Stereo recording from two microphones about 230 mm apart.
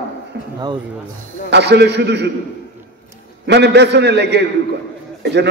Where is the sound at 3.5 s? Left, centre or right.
Right.